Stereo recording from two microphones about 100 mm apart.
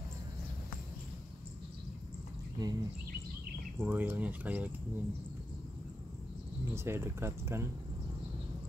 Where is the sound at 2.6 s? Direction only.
45° right (ahead or behind).